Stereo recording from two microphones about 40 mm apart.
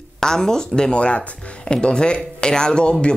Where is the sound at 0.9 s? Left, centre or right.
Left.